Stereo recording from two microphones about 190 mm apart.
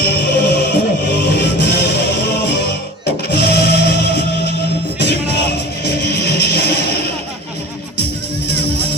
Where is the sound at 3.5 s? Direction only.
60° left (ahead or behind).